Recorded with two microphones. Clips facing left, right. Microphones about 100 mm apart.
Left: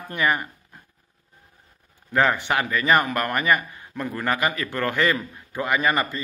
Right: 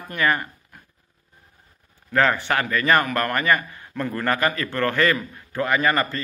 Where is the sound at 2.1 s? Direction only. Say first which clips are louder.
Right 1 dB; 15° left (ahead or behind).